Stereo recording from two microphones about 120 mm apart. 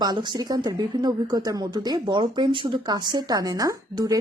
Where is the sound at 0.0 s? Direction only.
40° right (ahead or behind).